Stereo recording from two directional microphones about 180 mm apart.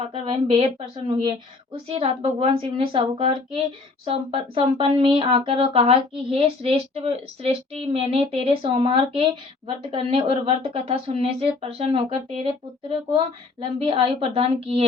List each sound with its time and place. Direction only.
0.0 s speech: 35° right (ahead or behind)
1.9 s a woman's voice: 30° right (ahead or behind)